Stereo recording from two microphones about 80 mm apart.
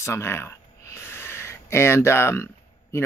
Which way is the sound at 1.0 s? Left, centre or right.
Left.